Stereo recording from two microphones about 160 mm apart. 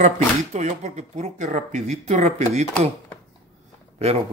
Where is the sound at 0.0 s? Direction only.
50° right (ahead or behind).